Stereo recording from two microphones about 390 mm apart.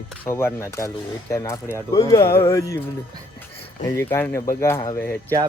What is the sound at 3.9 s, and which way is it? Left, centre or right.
Speech, centre.